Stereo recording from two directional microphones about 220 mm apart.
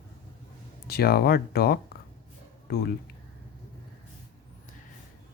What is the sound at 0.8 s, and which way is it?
Speech, 45° left (ahead or behind).